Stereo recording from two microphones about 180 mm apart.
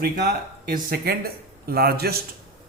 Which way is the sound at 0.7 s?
55° right (ahead or behind).